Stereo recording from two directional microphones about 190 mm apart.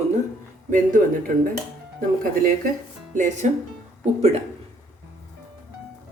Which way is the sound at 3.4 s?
40° right (ahead or behind).